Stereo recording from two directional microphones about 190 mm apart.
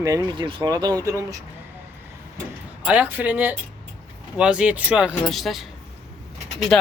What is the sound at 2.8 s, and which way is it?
Speech, 5° right (ahead or behind).